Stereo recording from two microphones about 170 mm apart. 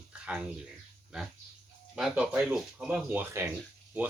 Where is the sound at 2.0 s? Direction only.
5° right (ahead or behind).